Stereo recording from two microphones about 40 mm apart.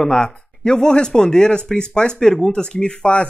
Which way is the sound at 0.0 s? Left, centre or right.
Centre.